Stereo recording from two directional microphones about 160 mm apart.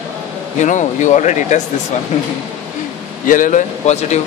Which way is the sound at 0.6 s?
50° left (ahead or behind).